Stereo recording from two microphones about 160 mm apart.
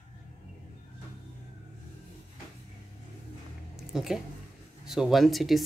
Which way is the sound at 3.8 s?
5° right (ahead or behind).